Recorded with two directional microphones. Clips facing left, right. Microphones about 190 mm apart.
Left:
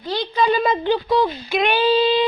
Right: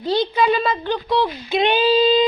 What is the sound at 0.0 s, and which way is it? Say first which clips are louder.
Speech: right 5 dB; 25° right (ahead or behind).